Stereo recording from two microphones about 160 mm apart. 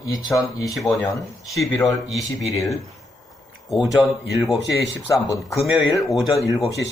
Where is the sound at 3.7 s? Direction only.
5° right (ahead or behind).